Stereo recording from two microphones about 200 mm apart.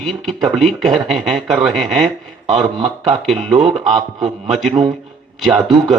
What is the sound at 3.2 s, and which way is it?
Speech, centre (ahead or behind).